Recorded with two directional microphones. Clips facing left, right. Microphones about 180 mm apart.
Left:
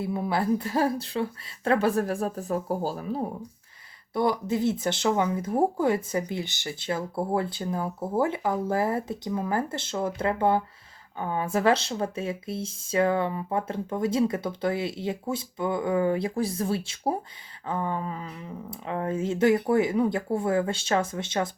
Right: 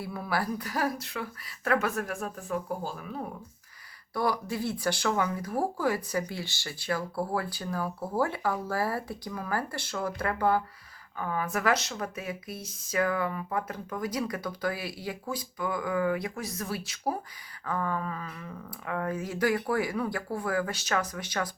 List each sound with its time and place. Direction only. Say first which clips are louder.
0.0 s speech: left 5 dB; 25° left (ahead or behind)
4.1 s speech: left 4 dB; 20° left (ahead or behind)